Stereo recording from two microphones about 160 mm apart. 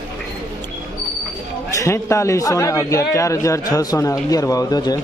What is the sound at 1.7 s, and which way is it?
A man's voice, 20° left (ahead or behind).